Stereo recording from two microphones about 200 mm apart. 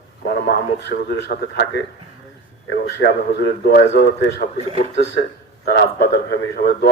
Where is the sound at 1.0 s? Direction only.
55° left (ahead or behind).